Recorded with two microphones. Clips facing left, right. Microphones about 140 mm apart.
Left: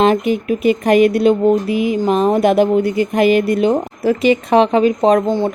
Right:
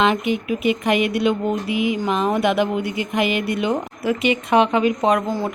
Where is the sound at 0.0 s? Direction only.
40° left (ahead or behind).